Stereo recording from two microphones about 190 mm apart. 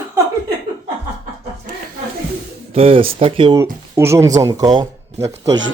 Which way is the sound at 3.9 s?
15° right (ahead or behind).